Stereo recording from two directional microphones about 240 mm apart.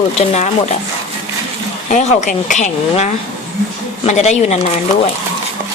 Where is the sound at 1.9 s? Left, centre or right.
Left.